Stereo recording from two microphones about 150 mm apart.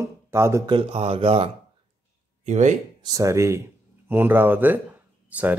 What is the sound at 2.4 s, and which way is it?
Speech, 55° right (ahead or behind).